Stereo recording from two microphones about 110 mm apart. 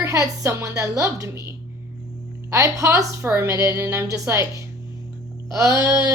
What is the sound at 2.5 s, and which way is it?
A woman's voice, 30° right (ahead or behind).